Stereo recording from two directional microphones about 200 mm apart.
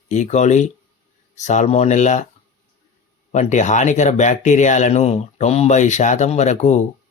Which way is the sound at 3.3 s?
35° left (ahead or behind).